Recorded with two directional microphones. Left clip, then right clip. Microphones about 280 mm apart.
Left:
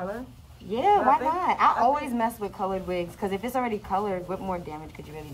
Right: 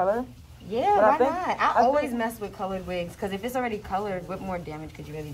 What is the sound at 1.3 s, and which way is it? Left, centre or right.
A woman's voice, left.